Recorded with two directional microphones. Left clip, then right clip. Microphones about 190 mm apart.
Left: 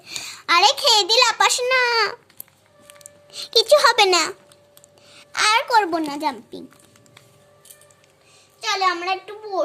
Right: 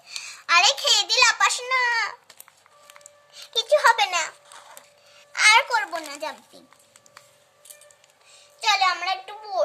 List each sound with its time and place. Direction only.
0.2 s a sound: 40° left (ahead or behind)
3.0 s music: 45° left (ahead or behind)
5.0 s speech: 40° left (ahead or behind)
8.6 s a child's voice: 5° left (ahead or behind)